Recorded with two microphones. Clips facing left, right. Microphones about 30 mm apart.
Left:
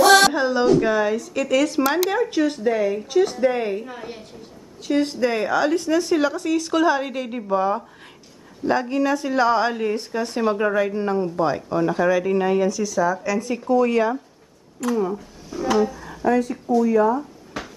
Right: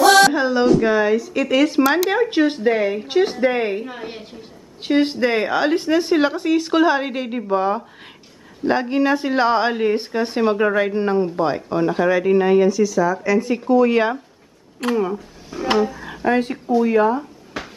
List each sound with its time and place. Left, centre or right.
0.3 s speech: centre
0.8 s speech: centre
2.0 s speech: right
12.8 s speech: centre
13.2 s speech: right
14.8 s speech: right
15.5 s speech: right
16.3 s speech: right
17.6 s cupboard open or close: centre